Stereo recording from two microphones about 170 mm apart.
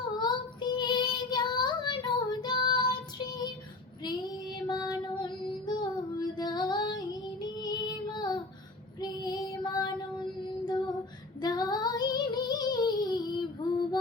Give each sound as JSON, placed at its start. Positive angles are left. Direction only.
{"t": 0.2, "sound": "child singing", "side_deg": 25}
{"t": 4.7, "sound": "female singing", "side_deg": 25}
{"t": 7.4, "sound": "child singing", "side_deg": 25}
{"t": 11.3, "sound": "child singing", "side_deg": 25}